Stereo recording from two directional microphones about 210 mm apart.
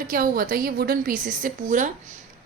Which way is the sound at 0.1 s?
40° right (ahead or behind).